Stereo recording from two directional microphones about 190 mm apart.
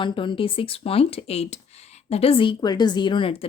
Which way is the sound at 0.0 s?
25° left (ahead or behind).